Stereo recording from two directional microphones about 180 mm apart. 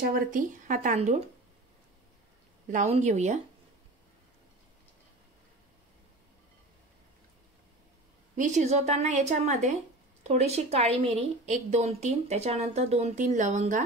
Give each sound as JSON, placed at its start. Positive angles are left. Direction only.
{"t": 0.0, "sound": "speech", "side_deg": -50}
{"t": 2.7, "sound": "a woman's voice", "side_deg": -40}
{"t": 8.4, "sound": "a woman's voice", "side_deg": -40}